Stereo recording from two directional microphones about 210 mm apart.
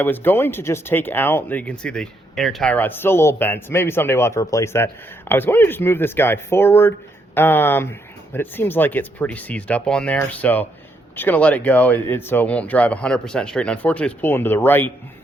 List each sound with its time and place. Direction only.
0.0 s speech: 10° left (ahead or behind)